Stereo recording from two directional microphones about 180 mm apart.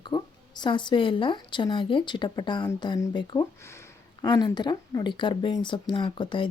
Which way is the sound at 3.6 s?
15° left (ahead or behind).